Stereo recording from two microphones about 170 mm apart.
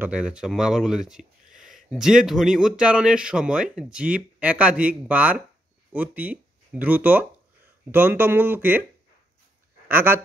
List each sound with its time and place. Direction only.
0.0 s speech: 5° right (ahead or behind)
9.8 s speech: 10° right (ahead or behind)